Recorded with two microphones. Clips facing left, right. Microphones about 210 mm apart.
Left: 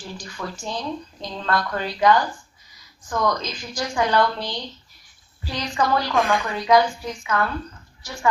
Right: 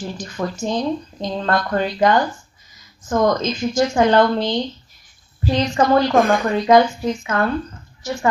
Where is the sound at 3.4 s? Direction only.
25° right (ahead or behind).